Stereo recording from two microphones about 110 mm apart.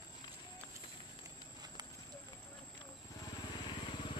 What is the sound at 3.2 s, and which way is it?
Vehicle, 40° left (ahead or behind).